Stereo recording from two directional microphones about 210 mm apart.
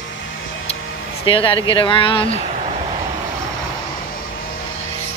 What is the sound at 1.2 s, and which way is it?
Speech, 25° left (ahead or behind).